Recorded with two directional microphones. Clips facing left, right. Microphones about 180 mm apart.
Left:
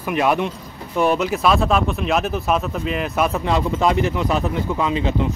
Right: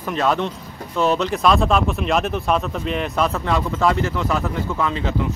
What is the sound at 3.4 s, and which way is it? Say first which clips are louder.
Speech: left 1 dB; 20° left (ahead or behind).